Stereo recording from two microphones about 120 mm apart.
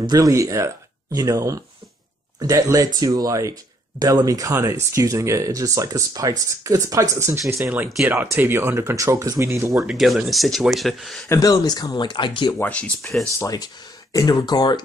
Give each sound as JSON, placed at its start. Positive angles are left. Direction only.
{"t": 0.0, "sound": "speech", "side_deg": -30}
{"t": 9.8, "sound": "speech", "side_deg": -5}
{"t": 11.2, "sound": "speech", "side_deg": 30}
{"t": 12.6, "sound": "speech", "side_deg": 10}
{"t": 13.4, "sound": "speech", "side_deg": 30}